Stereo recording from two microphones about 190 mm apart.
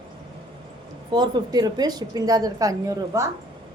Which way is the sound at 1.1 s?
20° right (ahead or behind).